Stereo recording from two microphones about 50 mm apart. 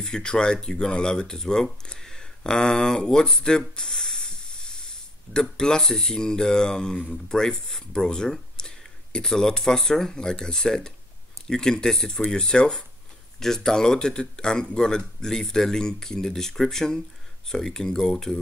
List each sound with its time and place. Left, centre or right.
0.0 s speech: centre